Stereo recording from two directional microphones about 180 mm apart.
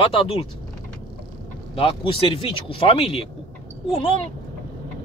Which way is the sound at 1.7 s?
30° left (ahead or behind).